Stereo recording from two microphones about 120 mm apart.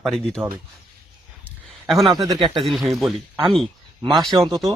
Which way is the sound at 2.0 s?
35° right (ahead or behind).